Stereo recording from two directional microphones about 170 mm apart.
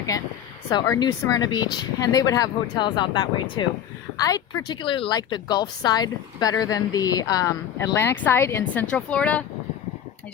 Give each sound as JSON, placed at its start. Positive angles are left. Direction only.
{"t": 0.7, "sound": "a woman's voice", "side_deg": 25}